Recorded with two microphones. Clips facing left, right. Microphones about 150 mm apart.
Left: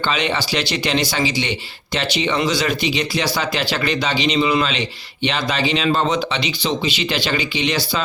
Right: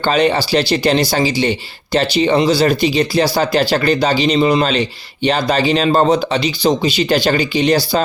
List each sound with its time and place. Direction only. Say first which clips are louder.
0.0 s a man's voice: right 7 dB; 40° right (ahead or behind)